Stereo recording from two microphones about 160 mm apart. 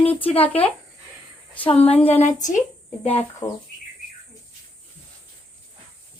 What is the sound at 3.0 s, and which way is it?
Speech, 40° left (ahead or behind).